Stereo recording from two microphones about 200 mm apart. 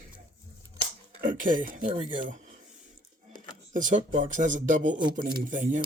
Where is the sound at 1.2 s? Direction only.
40° right (ahead or behind).